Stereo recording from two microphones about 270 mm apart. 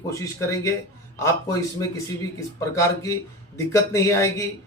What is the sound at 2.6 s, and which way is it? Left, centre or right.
Speech, centre.